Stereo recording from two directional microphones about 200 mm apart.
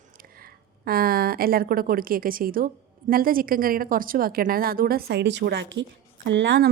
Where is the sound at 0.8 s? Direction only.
50° right (ahead or behind).